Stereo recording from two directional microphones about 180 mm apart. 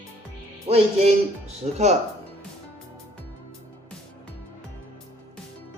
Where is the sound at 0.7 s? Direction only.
40° right (ahead or behind).